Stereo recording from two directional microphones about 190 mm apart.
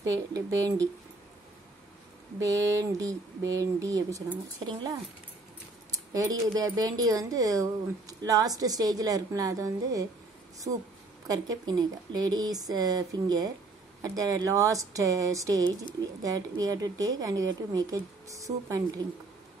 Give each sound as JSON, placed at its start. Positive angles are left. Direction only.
{"t": 0.0, "sound": "speech", "side_deg": -15}
{"t": 2.4, "sound": "speech", "side_deg": -15}
{"t": 11.2, "sound": "speech", "side_deg": -20}